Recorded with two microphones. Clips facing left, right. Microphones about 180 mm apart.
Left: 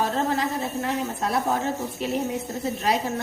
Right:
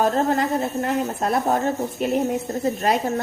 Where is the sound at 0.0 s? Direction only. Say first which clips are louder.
Right 4 dB; 50° right (ahead or behind).